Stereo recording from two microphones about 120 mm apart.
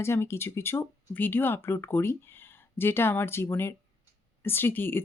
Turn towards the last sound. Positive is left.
turn(degrees=15)  # may be behind; listen again after turning